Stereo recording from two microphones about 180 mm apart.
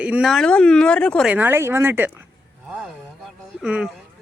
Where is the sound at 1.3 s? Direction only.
10° right (ahead or behind).